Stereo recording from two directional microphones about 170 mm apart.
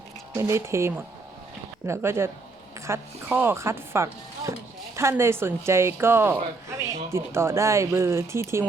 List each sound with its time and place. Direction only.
0.3 s a woman's voice: 15° right (ahead or behind)